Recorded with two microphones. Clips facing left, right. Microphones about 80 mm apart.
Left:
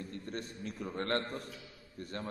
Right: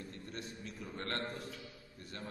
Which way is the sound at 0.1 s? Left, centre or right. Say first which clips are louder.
Left 5 dB; left.